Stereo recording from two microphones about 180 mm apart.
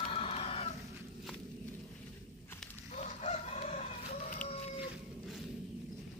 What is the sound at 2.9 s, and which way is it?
Chicken, 40° left (ahead or behind).